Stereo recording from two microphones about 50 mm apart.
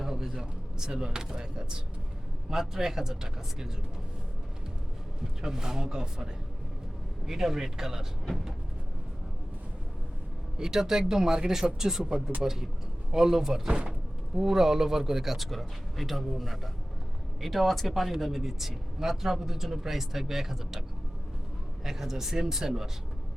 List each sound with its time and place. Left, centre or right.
0.0 s speech: centre
5.4 s speech: centre
7.3 s speech: centre
10.6 s speech: centre
13.7 s speech: right
14.3 s speech: centre
21.8 s speech: centre